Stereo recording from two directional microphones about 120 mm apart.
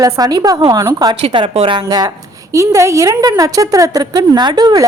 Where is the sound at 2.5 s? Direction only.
25° right (ahead or behind).